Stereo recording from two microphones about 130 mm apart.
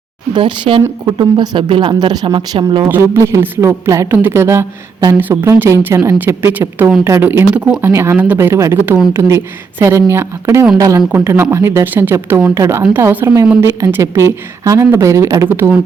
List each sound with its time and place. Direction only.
0.3 s speech: 40° right (ahead or behind)
2.9 s speech: 20° right (ahead or behind)